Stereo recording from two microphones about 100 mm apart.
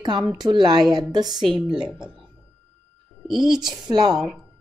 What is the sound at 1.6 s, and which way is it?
Speech, 5° right (ahead or behind).